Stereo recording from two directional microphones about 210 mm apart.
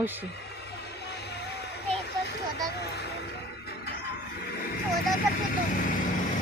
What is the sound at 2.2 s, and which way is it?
Music, 50° left (ahead or behind).